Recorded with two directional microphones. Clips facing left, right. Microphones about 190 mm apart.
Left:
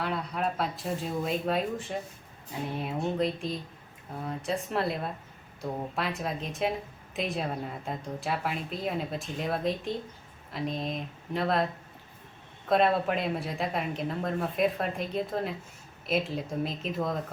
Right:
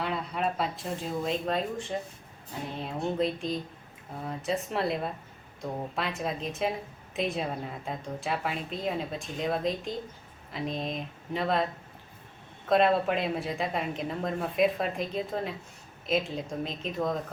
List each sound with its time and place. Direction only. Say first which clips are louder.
0.0 s a woman's voice: even; centre (ahead or behind)